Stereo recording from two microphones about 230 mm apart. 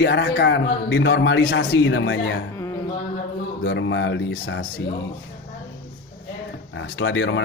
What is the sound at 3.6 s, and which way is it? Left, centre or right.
A man's voice, left.